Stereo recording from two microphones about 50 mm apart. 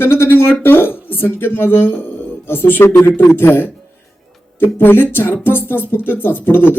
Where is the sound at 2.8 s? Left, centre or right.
Left.